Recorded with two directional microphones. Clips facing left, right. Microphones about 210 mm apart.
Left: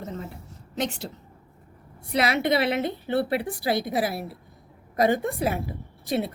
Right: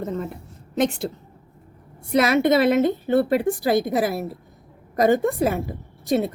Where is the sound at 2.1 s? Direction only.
45° right (ahead or behind).